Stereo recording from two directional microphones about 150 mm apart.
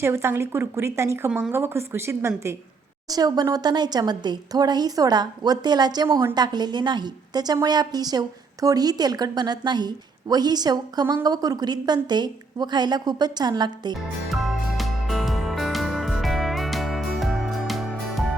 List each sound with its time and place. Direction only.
0.0 s speech: 15° right (ahead or behind)
1.3 s speech: 5° right (ahead or behind)
1.5 s a woman's voice: 15° right (ahead or behind)
14.3 s music: centre (ahead or behind)